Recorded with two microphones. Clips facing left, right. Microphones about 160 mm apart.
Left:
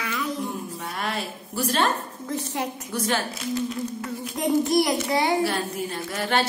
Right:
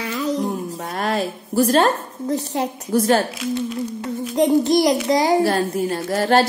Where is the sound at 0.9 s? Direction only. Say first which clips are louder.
Right 9 dB; 45° right (ahead or behind).